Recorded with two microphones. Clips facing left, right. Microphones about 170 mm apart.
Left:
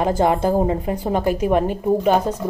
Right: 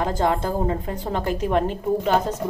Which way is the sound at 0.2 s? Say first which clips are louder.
Left 5 dB; 15° left (ahead or behind).